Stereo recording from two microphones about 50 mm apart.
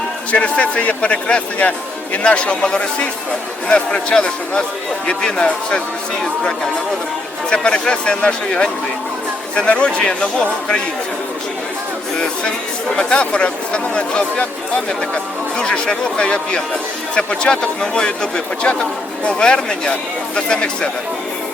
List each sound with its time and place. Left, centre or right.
0.4 s speech: left
7.5 s speech: centre
13.0 s speech: left